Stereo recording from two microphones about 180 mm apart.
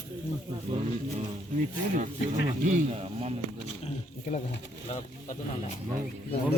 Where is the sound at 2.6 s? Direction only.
35° right (ahead or behind).